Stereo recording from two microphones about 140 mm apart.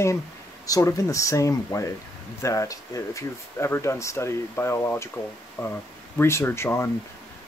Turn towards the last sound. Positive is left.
turn(degrees=20)  # may be behind; listen again after turning